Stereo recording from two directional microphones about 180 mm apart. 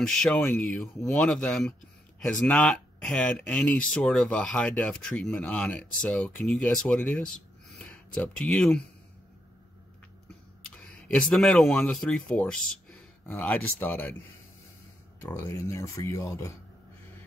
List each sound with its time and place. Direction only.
0.0 s speech: 5° left (ahead or behind)
11.1 s speech: 5° left (ahead or behind)
15.2 s speech: 15° left (ahead or behind)